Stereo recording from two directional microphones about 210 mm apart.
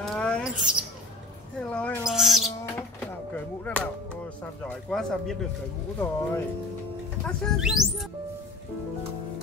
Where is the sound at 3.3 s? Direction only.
5° left (ahead or behind).